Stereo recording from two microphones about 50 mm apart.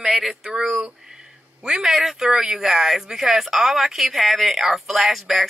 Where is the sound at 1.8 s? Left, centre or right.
Centre.